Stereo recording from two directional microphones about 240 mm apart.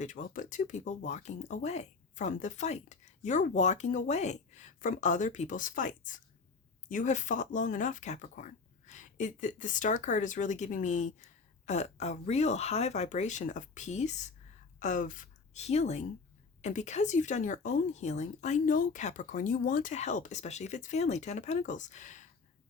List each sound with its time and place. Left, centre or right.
0.0 s a woman's voice: left